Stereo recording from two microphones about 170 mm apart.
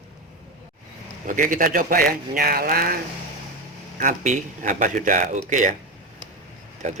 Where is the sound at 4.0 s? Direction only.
50° right (ahead or behind).